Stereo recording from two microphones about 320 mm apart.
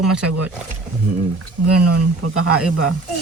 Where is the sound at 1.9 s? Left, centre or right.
Right.